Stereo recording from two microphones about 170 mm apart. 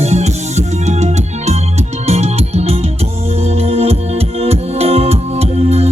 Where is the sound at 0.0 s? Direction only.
40° right (ahead or behind).